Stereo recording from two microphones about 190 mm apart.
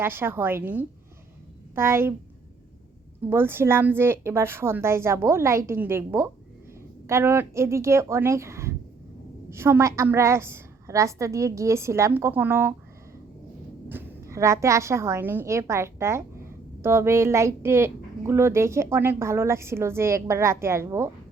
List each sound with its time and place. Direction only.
0.0 s a woman's voice: 10° right (ahead or behind)
3.2 s a woman's voice: 10° right (ahead or behind)
13.8 s a woman's voice: 10° right (ahead or behind)